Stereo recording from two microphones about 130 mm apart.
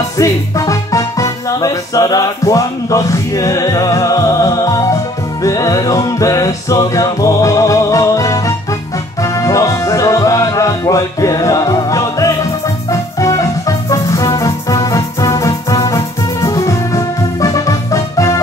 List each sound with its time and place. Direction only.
0.2 s music: 25° left (ahead or behind)